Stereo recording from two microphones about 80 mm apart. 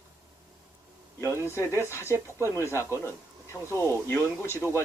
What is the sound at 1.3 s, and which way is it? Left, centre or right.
Speech, right.